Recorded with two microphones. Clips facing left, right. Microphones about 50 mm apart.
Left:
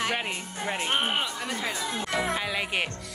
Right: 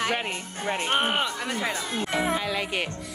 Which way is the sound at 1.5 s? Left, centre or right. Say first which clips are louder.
Right 2 dB; right.